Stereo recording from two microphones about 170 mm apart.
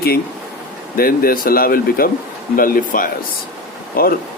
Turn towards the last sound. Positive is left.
turn(degrees=60)  # may be behind; listen again after turning